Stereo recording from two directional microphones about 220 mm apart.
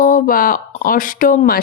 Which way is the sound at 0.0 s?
40° left (ahead or behind).